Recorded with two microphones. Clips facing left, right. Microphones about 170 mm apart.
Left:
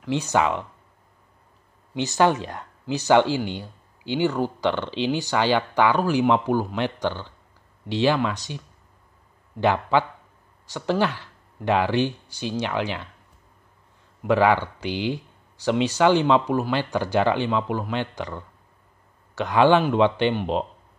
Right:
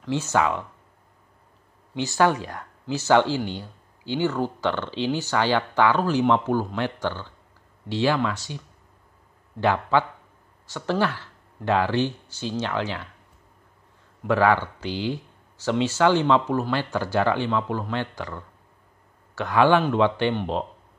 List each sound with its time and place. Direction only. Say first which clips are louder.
0.0 s speech: left 1 dB; 15° left (ahead or behind)
2.0 s speech: left 1 dB; 20° left (ahead or behind)
14.2 s speech: left 1 dB; 15° left (ahead or behind)